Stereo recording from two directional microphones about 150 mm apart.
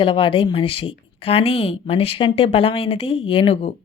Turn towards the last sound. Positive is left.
turn(degrees=40)  # may be behind; listen again after turning